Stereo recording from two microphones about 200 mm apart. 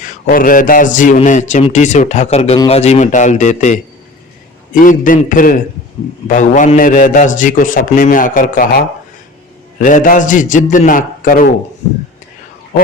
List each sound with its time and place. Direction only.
0.0 s a man's voice: 45° left (ahead or behind)